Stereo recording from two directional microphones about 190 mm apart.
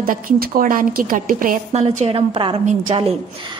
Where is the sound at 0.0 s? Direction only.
45° right (ahead or behind).